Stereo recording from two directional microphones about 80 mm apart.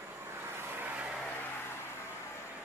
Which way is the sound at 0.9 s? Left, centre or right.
Centre.